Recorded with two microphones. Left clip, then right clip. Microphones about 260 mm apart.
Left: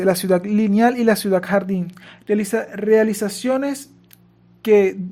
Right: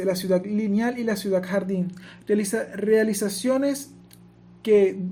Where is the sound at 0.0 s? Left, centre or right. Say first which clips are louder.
Left 6 dB; left.